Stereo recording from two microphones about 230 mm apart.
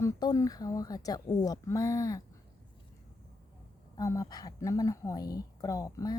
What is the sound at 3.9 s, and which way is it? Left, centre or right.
A woman's voice, centre.